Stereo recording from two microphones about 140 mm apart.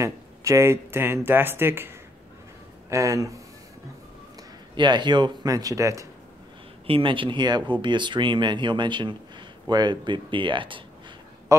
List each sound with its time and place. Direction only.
0.0 s speech: 20° right (ahead or behind)
4.7 s speech: 30° right (ahead or behind)
6.9 s speech: 40° right (ahead or behind)